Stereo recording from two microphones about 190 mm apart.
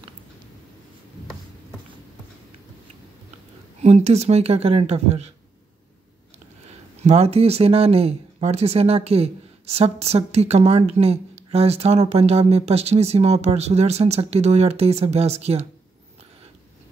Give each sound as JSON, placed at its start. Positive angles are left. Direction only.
{"t": 3.8, "sound": "speech", "side_deg": -35}
{"t": 7.0, "sound": "speech", "side_deg": -35}